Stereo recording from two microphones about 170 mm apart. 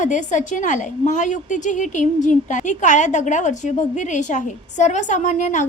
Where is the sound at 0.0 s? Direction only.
45° left (ahead or behind).